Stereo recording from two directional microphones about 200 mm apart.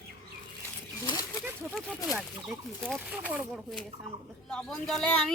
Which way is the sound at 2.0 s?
Centre (ahead or behind).